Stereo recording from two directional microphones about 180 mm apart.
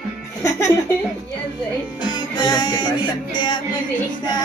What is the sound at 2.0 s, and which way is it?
Music, 25° left (ahead or behind).